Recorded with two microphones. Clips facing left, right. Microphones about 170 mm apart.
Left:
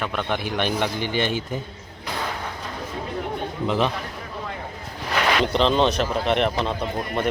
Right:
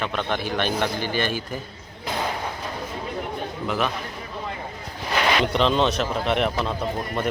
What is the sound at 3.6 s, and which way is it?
Speech, 25° left (ahead or behind).